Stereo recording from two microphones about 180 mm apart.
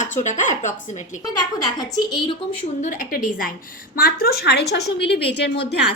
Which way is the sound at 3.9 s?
55° left (ahead or behind).